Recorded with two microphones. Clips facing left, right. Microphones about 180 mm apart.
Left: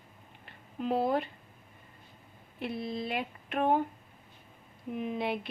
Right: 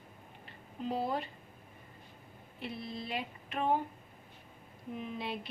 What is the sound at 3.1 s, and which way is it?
Speech, 60° left (ahead or behind).